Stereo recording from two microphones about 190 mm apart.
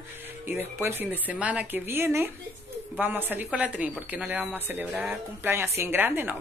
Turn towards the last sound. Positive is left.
turn(degrees=-10)  # may be behind; listen again after turning